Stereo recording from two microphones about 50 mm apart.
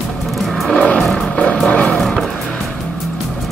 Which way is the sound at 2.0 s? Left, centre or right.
Centre.